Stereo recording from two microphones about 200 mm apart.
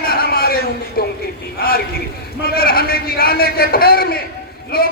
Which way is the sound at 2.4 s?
50° left (ahead or behind).